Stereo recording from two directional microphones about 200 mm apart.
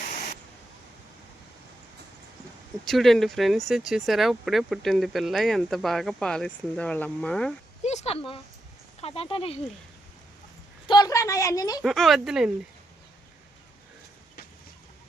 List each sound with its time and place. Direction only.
2.8 s speech: centre (ahead or behind)
7.9 s speech: 30° left (ahead or behind)
10.8 s a woman's voice: 20° left (ahead or behind)
11.8 s speech: centre (ahead or behind)